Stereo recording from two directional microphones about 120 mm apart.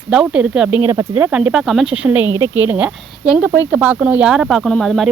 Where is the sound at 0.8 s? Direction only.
20° right (ahead or behind).